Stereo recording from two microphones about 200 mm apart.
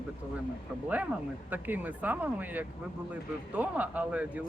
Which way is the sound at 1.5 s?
10° right (ahead or behind).